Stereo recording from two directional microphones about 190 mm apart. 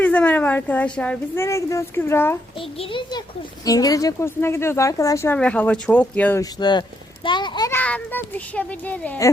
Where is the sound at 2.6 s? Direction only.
30° left (ahead or behind).